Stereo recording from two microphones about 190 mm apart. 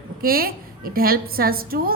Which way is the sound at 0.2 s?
50° right (ahead or behind).